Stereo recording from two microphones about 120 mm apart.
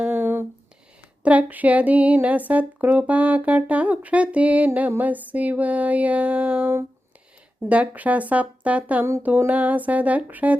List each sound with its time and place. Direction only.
0.0 s a sound: 15° right (ahead or behind)
1.2 s speech: 10° right (ahead or behind)
7.7 s speech: 10° right (ahead or behind)